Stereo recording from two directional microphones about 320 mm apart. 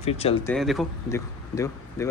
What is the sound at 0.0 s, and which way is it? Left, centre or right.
Speech, centre.